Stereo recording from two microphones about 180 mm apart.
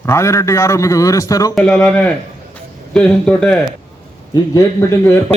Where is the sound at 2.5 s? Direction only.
5° left (ahead or behind).